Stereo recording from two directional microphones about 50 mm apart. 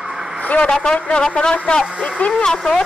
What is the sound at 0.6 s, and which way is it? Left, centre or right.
A woman's voice, centre.